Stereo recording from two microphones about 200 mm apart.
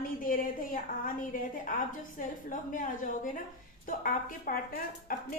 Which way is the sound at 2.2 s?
40° left (ahead or behind).